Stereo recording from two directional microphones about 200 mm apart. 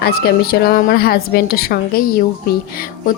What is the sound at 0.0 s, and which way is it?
A woman's voice, 50° left (ahead or behind).